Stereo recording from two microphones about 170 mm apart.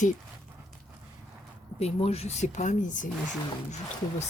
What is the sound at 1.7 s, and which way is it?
Speech, 35° left (ahead or behind).